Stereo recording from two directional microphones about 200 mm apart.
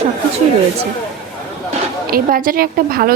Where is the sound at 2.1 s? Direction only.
45° right (ahead or behind).